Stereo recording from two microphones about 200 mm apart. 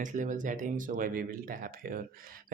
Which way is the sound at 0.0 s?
40° right (ahead or behind).